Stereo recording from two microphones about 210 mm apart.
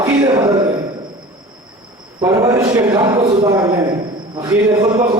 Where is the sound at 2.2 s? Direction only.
15° right (ahead or behind).